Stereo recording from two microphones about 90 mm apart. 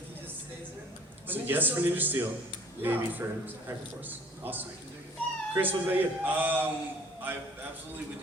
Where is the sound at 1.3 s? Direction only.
20° right (ahead or behind).